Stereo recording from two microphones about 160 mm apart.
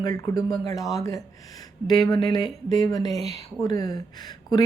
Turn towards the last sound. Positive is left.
turn(degrees=25)  # may be behind; listen again after turning